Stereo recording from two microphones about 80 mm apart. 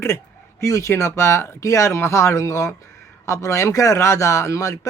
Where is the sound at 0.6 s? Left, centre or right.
Left.